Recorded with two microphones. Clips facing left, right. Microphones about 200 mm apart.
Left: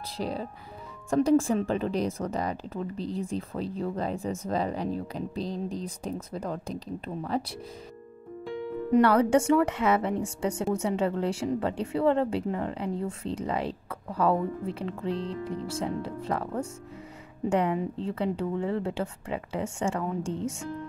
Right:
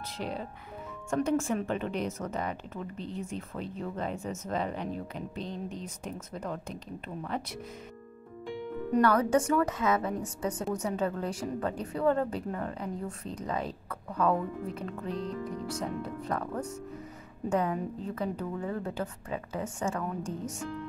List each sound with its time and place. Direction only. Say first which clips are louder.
0.2 s speech: left 4 dB; 35° left (ahead or behind)
9.0 s a woman's voice: left 2 dB; 30° left (ahead or behind)
17.5 s a woman's voice: left 3 dB; 30° left (ahead or behind)